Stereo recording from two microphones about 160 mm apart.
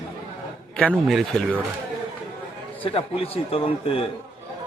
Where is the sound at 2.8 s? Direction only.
35° left (ahead or behind).